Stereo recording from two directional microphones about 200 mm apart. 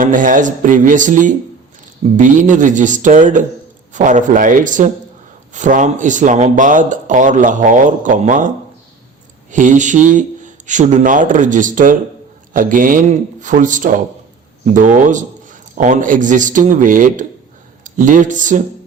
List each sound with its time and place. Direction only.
0.0 s speech: 40° right (ahead or behind)